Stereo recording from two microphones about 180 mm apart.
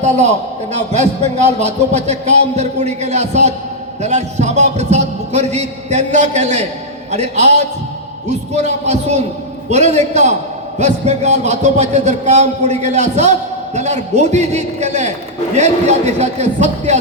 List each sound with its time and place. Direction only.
0.9 s a man's voice: 40° right (ahead or behind)